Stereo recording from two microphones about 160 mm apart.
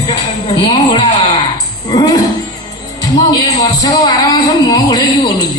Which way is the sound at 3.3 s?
25° left (ahead or behind).